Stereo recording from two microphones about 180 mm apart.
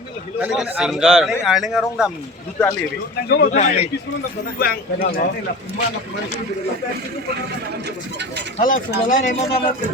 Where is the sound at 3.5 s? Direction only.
40° left (ahead or behind).